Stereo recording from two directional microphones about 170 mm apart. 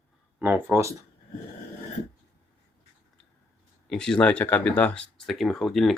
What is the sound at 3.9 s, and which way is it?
Speech, 5° left (ahead or behind).